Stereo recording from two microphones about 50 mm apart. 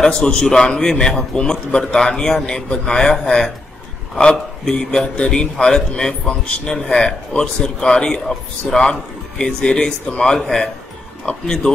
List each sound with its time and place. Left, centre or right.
0.0 s a man's voice: centre